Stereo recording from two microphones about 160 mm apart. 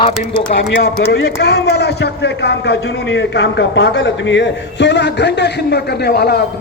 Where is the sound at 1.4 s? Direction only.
90° left.